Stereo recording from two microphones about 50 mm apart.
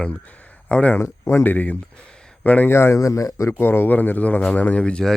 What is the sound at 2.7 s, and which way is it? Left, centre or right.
Speech, left.